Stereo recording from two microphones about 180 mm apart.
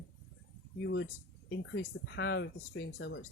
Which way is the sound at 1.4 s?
80° left.